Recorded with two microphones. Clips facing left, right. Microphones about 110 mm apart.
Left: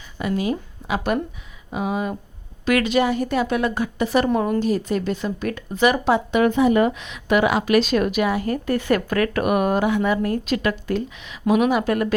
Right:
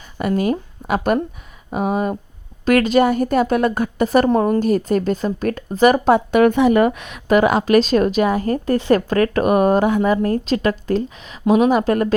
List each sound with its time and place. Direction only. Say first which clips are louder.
0.2 s a woman's voice: right 4 dB; 50° right (ahead or behind); by 12.1 s 35° right (ahead or behind)